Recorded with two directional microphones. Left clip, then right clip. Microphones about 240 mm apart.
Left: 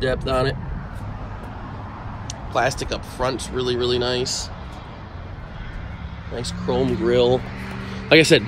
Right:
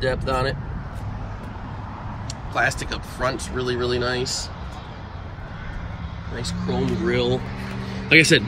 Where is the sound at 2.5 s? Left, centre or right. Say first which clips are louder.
Left 1 dB; centre.